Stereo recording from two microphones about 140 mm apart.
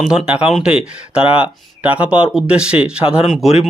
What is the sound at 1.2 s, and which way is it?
Speech, 40° left (ahead or behind).